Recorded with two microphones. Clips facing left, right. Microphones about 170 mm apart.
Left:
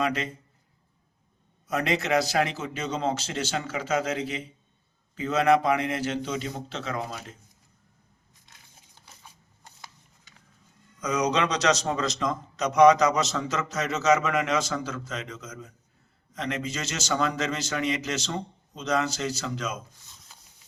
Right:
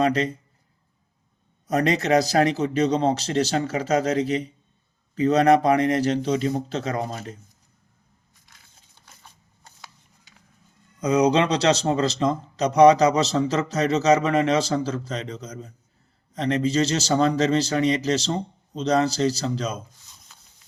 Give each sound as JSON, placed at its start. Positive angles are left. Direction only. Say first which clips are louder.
{"t": 0.0, "sound": "a man's voice", "louder": "right 6 dB", "side_deg": -35}
{"t": 1.6, "sound": "a man's voice", "louder": "right 5 dB", "side_deg": -40}
{"t": 11.0, "sound": "a man's voice", "louder": "right 6 dB", "side_deg": -35}